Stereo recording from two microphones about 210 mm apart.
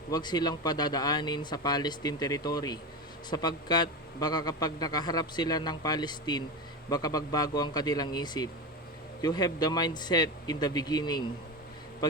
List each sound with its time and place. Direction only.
0.1 s a man's voice: 20° left (ahead or behind)